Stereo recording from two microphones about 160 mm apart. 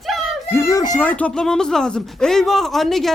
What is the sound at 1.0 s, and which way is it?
Speech, 10° left (ahead or behind).